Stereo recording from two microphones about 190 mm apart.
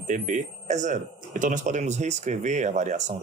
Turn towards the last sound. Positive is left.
turn(degrees=-40)  # may be behind; listen again after turning